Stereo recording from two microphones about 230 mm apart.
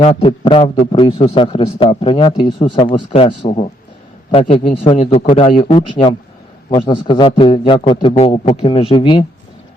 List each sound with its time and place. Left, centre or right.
0.0 s a man's voice: left